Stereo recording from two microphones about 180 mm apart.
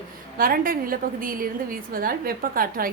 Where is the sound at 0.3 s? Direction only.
50° right (ahead or behind).